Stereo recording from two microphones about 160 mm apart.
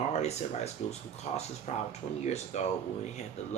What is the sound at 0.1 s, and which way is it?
Speech, 45° left (ahead or behind).